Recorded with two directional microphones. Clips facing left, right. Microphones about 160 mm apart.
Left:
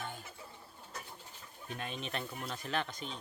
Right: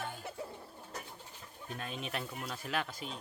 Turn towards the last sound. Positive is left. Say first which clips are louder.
# even
turn(degrees=-5)  # may be behind; listen again after turning